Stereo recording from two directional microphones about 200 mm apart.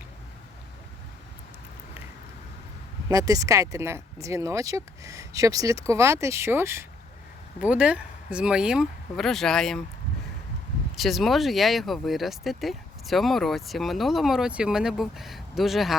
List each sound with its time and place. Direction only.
3.1 s speech: 15° right (ahead or behind); by 9.8 s centre (ahead or behind)
10.9 s speech: centre (ahead or behind)